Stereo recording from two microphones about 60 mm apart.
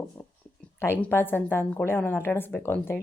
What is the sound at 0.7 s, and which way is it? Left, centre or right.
A woman's voice, left.